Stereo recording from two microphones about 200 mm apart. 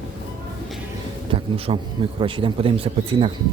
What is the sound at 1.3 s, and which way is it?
A man's voice, 30° right (ahead or behind).